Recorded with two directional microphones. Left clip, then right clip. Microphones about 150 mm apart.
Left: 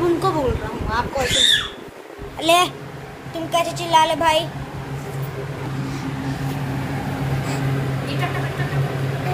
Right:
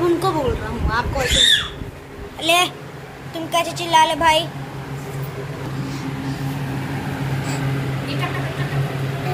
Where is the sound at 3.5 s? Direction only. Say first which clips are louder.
Even; centre (ahead or behind).